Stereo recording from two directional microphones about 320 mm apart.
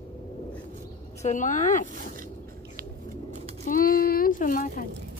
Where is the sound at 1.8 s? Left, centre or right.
Right.